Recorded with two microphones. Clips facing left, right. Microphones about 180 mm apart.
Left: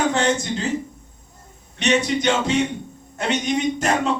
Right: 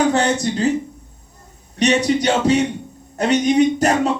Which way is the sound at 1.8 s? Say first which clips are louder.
Right 3 dB; 40° right (ahead or behind).